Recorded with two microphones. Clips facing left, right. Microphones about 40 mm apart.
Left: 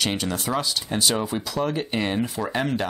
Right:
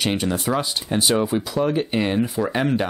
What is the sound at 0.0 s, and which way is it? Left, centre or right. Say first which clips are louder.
Speech: right 3 dB; centre.